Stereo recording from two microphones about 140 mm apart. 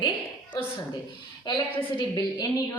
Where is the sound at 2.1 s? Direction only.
30° left (ahead or behind).